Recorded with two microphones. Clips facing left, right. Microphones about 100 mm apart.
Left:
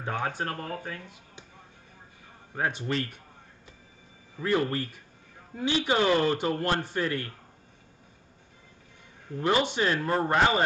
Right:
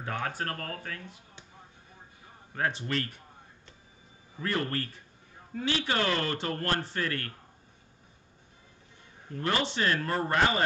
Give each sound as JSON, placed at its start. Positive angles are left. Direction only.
{"t": 0.0, "sound": "speech", "side_deg": 20}
{"t": 2.5, "sound": "speech", "side_deg": 20}
{"t": 4.4, "sound": "a man's voice", "side_deg": 15}
{"t": 9.4, "sound": "speech", "side_deg": 15}